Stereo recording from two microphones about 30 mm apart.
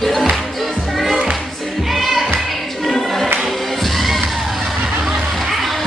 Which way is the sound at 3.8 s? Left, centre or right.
Centre.